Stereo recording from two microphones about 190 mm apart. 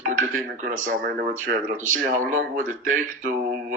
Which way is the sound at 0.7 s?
45° right (ahead or behind).